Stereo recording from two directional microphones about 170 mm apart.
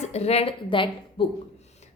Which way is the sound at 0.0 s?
40° left (ahead or behind).